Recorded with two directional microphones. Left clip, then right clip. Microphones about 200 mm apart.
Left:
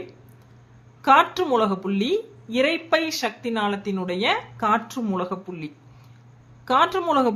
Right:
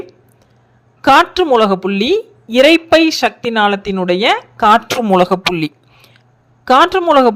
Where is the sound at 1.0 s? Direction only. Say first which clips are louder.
Right 8 dB; 45° right (ahead or behind).